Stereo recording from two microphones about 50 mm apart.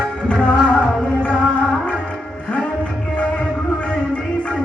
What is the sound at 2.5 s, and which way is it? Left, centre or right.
Music, left.